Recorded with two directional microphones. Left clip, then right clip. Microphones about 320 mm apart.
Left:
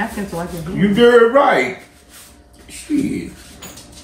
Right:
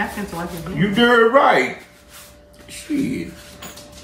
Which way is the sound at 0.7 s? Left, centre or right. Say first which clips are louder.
Left 4 dB; centre.